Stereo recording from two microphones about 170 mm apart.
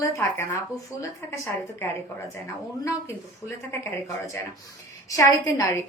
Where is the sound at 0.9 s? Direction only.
10° right (ahead or behind).